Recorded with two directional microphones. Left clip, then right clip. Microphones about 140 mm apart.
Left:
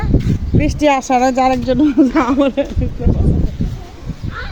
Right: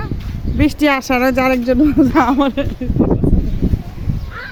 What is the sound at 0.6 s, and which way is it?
Speech, 30° right (ahead or behind).